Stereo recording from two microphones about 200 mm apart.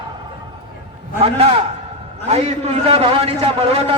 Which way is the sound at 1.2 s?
30° right (ahead or behind).